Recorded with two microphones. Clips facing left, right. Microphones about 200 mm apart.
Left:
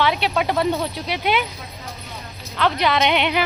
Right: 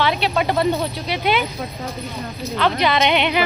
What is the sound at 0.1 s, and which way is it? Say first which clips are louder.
Speech: right 1 dB; 5° left (ahead or behind).